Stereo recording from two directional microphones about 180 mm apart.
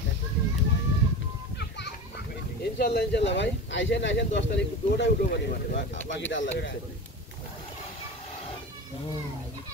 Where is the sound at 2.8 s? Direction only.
70° left (ahead or behind); by 6.8 s 85° left.